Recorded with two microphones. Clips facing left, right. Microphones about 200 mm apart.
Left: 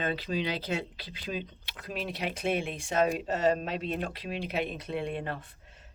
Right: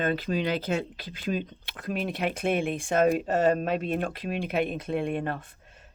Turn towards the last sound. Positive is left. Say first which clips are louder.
# right 3 dB
turn(degrees=-50)  # may be behind; listen again after turning